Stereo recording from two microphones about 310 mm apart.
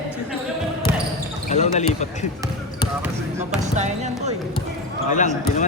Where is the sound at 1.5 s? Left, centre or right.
Left.